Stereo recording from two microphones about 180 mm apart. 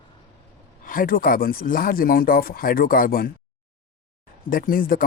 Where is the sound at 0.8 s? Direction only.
50° left (ahead or behind).